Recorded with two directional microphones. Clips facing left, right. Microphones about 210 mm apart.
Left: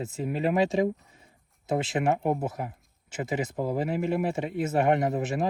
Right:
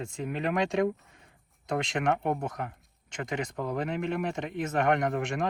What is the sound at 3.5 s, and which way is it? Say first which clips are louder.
Speech: left 4 dB; 30° left (ahead or behind).